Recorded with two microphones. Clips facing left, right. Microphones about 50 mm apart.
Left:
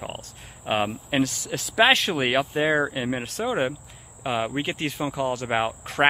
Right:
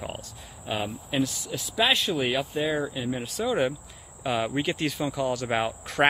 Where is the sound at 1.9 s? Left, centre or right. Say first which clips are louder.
Left 4 dB; left.